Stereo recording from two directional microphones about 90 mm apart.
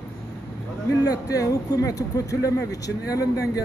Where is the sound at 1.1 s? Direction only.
40° left (ahead or behind).